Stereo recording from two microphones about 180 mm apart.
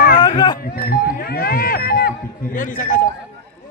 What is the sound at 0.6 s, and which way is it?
Speech, 55° left (ahead or behind).